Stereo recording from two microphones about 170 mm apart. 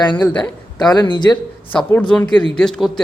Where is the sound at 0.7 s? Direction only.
25° left (ahead or behind).